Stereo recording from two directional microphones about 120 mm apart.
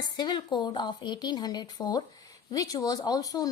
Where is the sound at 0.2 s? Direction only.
35° left (ahead or behind).